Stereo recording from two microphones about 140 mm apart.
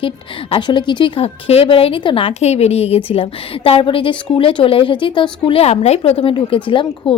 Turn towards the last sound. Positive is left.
turn(degrees=35)  # may be behind; listen again after turning